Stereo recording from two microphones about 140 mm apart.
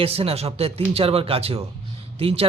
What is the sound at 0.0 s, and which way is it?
Speech, 45° right (ahead or behind).